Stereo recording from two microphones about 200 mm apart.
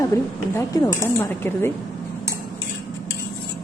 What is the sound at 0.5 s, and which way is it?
Speech, 20° left (ahead or behind).